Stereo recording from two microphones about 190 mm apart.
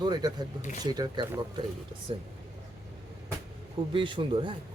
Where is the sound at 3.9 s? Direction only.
25° right (ahead or behind).